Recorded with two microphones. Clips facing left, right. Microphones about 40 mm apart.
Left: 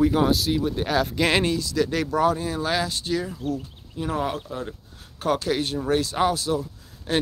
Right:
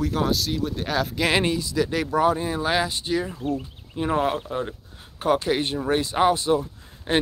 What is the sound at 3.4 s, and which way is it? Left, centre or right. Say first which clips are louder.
Speech: right 1 dB; right.